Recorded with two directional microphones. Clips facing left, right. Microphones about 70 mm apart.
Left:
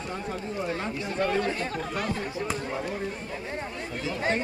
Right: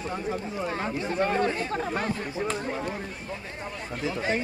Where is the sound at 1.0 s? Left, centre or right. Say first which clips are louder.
Right 2 dB; right.